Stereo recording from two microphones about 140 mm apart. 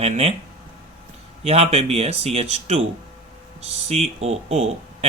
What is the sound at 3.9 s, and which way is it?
Speech, 50° right (ahead or behind).